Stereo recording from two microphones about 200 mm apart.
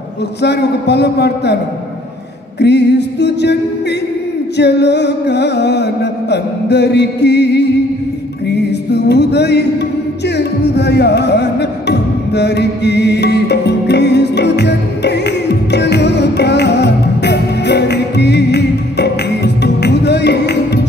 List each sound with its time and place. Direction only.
0.4 s music: 55° left (ahead or behind)
2.6 s music: 55° left (ahead or behind)
4.6 s music: 55° left (ahead or behind)